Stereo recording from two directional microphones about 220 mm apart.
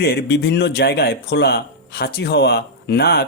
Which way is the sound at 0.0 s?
45° left (ahead or behind).